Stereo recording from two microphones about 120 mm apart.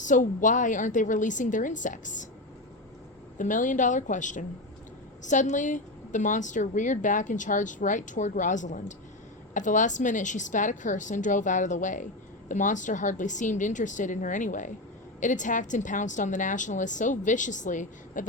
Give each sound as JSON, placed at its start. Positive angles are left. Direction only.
{"t": 0.0, "sound": "a woman's voice", "side_deg": 90}
{"t": 3.3, "sound": "a woman's voice", "side_deg": 90}